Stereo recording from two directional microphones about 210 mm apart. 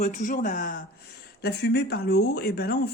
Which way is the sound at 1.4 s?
50° left (ahead or behind).